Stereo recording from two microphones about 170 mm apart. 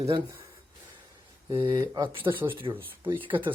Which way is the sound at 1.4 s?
20° right (ahead or behind).